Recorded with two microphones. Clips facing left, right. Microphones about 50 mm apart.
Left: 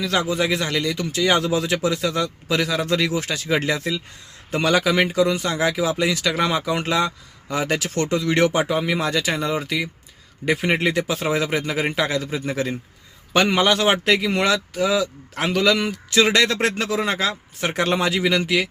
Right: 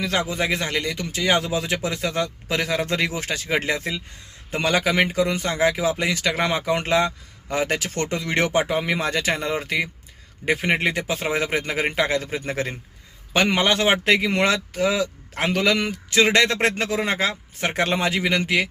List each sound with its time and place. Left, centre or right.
0.0 s a man's voice: right
9.0 s a man's voice: right
17.7 s a man's voice: right